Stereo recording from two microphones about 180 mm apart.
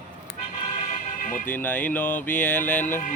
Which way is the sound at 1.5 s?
10° left (ahead or behind).